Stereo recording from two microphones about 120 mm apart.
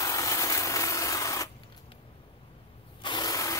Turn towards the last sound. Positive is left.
turn(degrees=30)  # may be behind; listen again after turning